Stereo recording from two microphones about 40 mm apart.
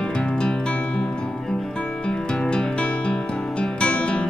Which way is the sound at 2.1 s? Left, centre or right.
Left.